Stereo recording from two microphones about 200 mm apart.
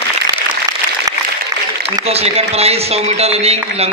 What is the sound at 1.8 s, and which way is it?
A man's voice, 30° right (ahead or behind).